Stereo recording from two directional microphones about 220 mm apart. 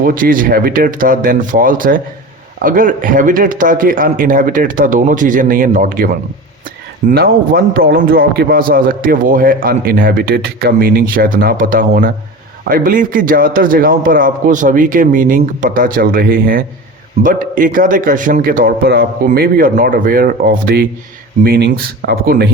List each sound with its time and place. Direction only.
0.0 s a man's voice: 40° right (ahead or behind)
7.1 s a man's voice: 45° right (ahead or behind)